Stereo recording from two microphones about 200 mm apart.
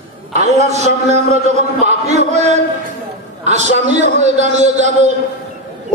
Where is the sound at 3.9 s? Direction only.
35° right (ahead or behind).